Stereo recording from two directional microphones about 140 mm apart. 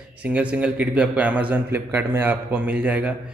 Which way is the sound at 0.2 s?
10° right (ahead or behind).